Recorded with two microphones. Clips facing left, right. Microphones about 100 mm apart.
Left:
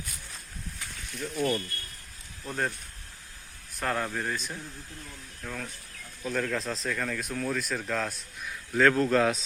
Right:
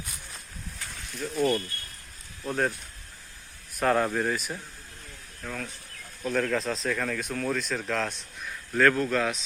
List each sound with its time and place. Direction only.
1.2 s speech: centre (ahead or behind)
3.8 s speech: 15° right (ahead or behind); by 8.8 s 5° left (ahead or behind)
8.8 s speech: 20° left (ahead or behind)